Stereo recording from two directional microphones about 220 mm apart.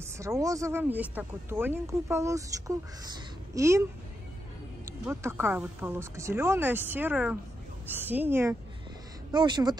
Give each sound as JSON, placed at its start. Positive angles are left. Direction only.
{"t": 0.0, "sound": "speech", "side_deg": -15}
{"t": 4.8, "sound": "speech", "side_deg": -10}